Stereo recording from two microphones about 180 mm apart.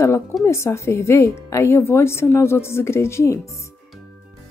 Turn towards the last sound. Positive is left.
turn(degrees=15)  # may be behind; listen again after turning